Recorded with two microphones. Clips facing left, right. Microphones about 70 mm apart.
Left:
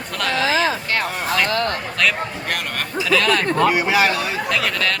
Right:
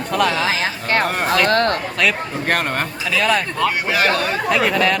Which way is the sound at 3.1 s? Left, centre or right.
Centre.